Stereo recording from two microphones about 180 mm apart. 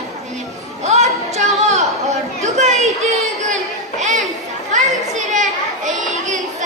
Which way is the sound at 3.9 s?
40° right (ahead or behind).